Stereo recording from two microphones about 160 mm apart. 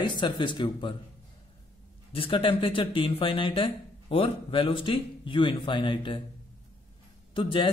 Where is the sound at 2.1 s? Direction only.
35° left (ahead or behind).